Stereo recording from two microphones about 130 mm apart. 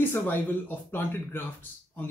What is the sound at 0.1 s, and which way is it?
A man's voice, 15° left (ahead or behind).